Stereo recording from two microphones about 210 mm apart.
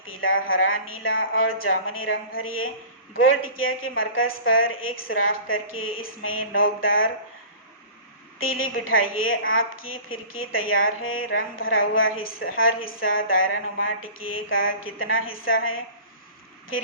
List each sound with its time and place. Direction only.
0.0 s a woman's voice: 70° left (ahead or behind)
8.4 s a woman's voice: 75° left (ahead or behind)